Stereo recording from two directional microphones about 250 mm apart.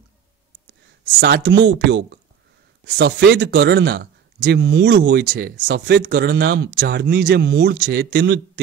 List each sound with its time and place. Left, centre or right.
1.2 s speech: right